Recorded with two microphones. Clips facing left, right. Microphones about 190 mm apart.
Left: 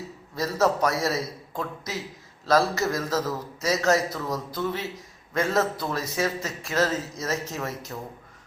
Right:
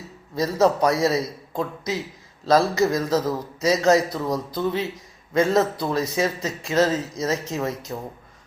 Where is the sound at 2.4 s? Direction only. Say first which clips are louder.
Right 4 dB; 20° right (ahead or behind).